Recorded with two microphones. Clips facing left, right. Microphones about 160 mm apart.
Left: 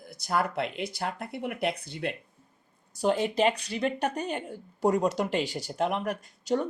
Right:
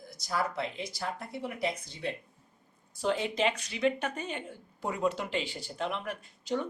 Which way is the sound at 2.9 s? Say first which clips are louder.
Left 5 dB; 45° left (ahead or behind).